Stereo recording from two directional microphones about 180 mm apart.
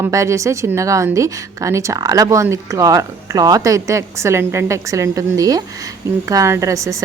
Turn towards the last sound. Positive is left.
turn(degrees=-15)  # may be behind; listen again after turning